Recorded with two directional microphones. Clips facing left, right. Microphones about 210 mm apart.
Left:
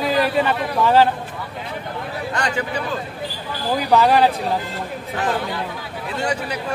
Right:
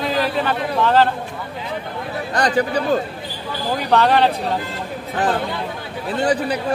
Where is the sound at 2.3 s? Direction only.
35° right (ahead or behind).